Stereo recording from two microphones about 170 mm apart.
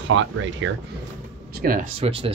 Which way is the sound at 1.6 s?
55° right (ahead or behind).